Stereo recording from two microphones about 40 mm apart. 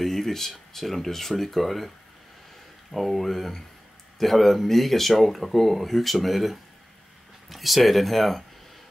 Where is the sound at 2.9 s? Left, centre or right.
Centre.